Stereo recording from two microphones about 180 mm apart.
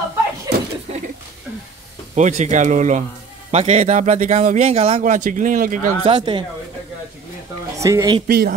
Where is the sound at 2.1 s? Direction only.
40° right (ahead or behind).